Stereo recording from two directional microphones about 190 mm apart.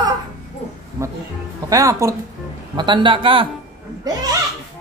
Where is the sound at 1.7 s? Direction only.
15° right (ahead or behind).